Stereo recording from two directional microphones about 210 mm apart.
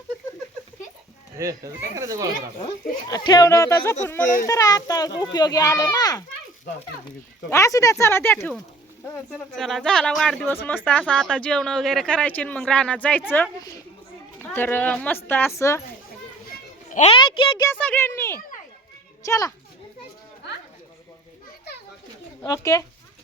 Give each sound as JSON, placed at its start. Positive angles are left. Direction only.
{"t": 1.4, "sound": "speech", "side_deg": -15}
{"t": 2.6, "sound": "a child's voice", "side_deg": 25}
{"t": 7.5, "sound": "a child's voice", "side_deg": 15}
{"t": 16.9, "sound": "a sound", "side_deg": 30}
{"t": 17.7, "sound": "a child's voice", "side_deg": 10}
{"t": 22.4, "sound": "speech", "side_deg": 15}